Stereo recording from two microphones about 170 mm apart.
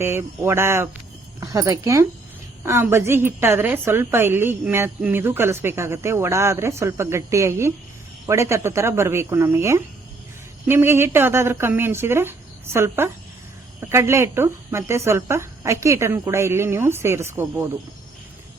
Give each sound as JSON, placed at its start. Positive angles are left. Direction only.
{"t": 0.0, "sound": "a woman's voice", "side_deg": -15}